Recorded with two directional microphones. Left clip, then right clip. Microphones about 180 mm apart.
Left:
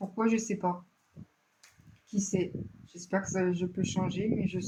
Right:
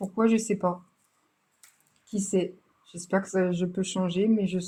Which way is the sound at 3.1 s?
50° right (ahead or behind).